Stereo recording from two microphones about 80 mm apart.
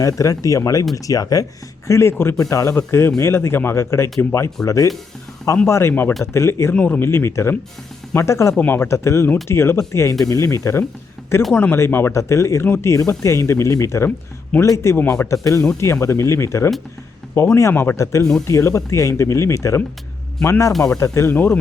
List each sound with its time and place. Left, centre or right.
0.0 s speech: left
1.9 s speech: left
6.7 s speech: centre
7.0 s speech: left
11.5 s speech: left
21.3 s speech: left